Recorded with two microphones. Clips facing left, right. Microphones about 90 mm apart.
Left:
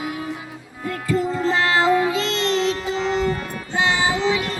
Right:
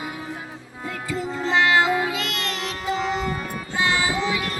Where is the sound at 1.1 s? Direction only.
40° left (ahead or behind).